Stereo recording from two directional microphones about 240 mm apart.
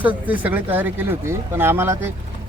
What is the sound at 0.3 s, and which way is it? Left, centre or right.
Speech, centre.